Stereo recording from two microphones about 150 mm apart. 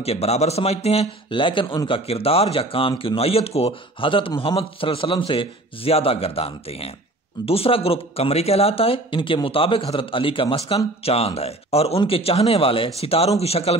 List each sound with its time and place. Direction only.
0.0 s a man's voice: 45° left (ahead or behind)